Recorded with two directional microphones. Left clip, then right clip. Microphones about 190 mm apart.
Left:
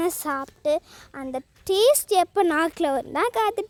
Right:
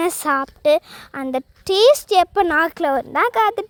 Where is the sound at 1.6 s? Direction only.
30° right (ahead or behind).